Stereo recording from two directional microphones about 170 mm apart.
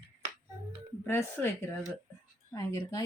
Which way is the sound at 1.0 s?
15° left (ahead or behind).